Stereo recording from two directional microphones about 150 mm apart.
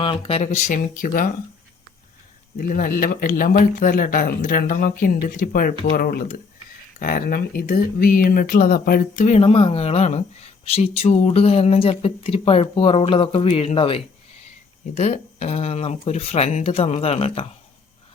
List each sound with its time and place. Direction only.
0.0 s speech: 35° left (ahead or behind)
0.8 s speech: 65° left (ahead or behind)
2.6 s speech: 65° left (ahead or behind)
6.0 s speech: 80° left
9.2 s speech: 45° left (ahead or behind)